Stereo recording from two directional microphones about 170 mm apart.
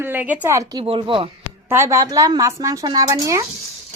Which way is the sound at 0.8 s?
30° right (ahead or behind).